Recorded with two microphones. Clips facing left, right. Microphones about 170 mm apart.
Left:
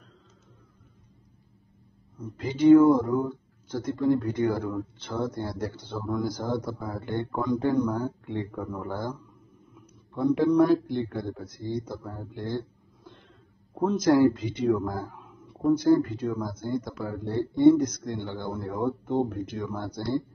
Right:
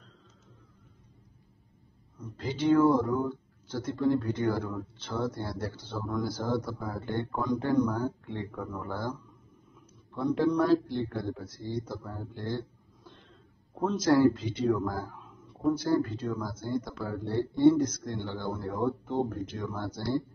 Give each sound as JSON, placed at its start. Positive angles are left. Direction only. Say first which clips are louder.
{"t": 2.1, "sound": "speech", "louder": "left 4 dB", "side_deg": 15}
{"t": 12.0, "sound": "a sound", "louder": "left 2 dB", "side_deg": 15}
{"t": 13.7, "sound": "speech", "louder": "left 3 dB", "side_deg": 10}